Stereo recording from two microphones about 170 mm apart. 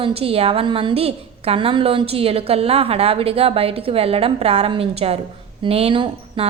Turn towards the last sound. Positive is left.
turn(degrees=-30)  # may be behind; listen again after turning